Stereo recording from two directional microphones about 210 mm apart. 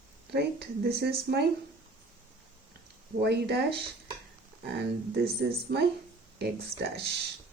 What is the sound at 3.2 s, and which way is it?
Speech, 55° right (ahead or behind).